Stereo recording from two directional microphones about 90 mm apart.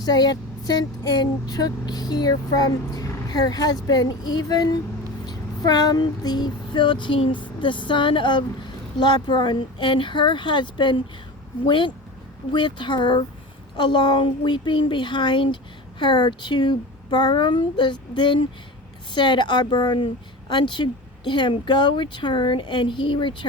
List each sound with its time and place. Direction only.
0.0 s speech: 50° left (ahead or behind)
5.2 s female singing: 45° left (ahead or behind); by 7.4 s 65° left (ahead or behind)
7.6 s speech: 65° left (ahead or behind)